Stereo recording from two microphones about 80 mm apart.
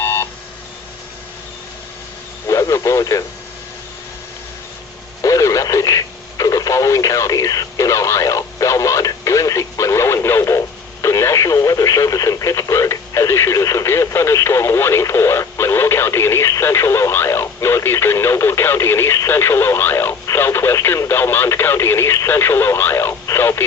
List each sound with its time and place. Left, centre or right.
0.0 s telephone dialing: left
2.5 s radio: left
5.2 s radio: left
11.0 s speech: left